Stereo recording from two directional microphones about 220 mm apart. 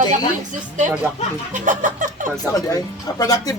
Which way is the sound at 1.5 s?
35° right (ahead or behind).